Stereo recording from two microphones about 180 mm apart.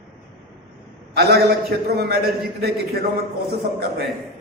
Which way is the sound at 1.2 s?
60° right (ahead or behind).